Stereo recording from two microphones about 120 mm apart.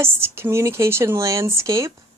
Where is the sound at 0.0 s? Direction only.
20° right (ahead or behind).